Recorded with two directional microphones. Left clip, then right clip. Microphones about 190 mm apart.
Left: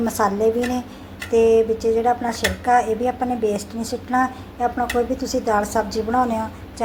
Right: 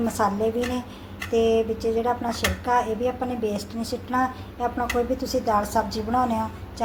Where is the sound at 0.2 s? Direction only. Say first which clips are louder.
Left 5 dB; 15° left (ahead or behind).